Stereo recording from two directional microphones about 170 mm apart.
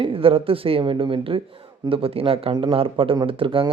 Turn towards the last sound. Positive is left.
turn(degrees=-30)  # may be behind; listen again after turning